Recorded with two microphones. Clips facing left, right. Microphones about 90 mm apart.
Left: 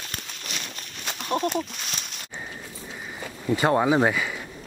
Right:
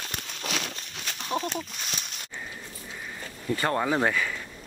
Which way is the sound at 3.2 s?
15° left (ahead or behind).